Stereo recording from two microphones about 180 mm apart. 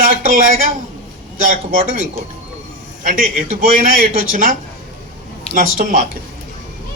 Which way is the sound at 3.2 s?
50° right (ahead or behind).